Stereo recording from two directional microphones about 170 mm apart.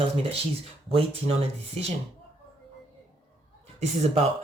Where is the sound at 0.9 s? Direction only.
35° right (ahead or behind).